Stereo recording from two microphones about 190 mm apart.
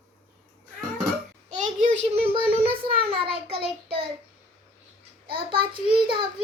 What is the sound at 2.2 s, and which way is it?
Child singing, 30° right (ahead or behind).